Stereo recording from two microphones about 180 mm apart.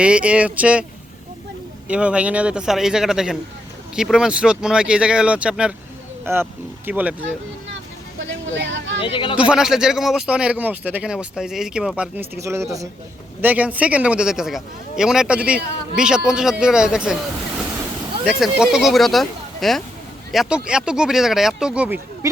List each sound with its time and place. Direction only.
0.0 s speech: 5° right (ahead or behind)
1.9 s a man's voice: 5° right (ahead or behind)
8.2 s speech: 90° right
9.0 s speech: 30° left (ahead or behind)
9.5 s a man's voice: 5° right (ahead or behind)
18.3 s a man's voice: 5° right (ahead or behind)